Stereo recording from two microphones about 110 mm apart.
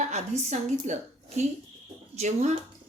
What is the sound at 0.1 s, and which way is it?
Speech, 90° right.